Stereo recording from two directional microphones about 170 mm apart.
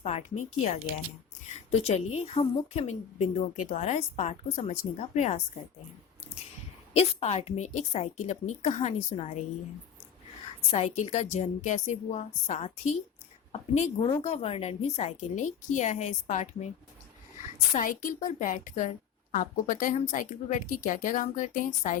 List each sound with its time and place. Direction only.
0.0 s a woman's voice: 40° left (ahead or behind)
6.9 s a woman's voice: 35° left (ahead or behind)
10.7 s a woman's voice: 40° left (ahead or behind)
17.7 s a woman's voice: 50° left (ahead or behind)